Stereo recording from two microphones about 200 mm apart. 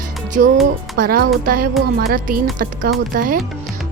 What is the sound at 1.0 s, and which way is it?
Speech, 50° right (ahead or behind).